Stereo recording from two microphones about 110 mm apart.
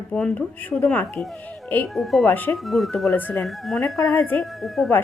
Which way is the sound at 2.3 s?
20° left (ahead or behind).